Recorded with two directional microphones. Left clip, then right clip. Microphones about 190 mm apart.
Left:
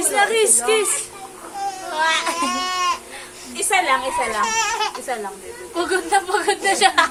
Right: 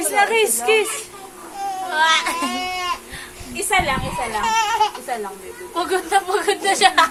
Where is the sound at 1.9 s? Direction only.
45° right (ahead or behind).